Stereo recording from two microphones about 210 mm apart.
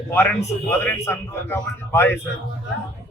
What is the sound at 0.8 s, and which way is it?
Speech, 10° left (ahead or behind).